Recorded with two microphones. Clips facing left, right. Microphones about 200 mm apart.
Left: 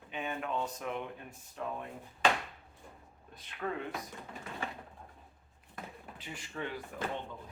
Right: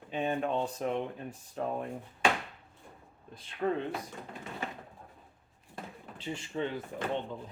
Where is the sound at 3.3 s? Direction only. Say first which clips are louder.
Right 7 dB; 30° right (ahead or behind).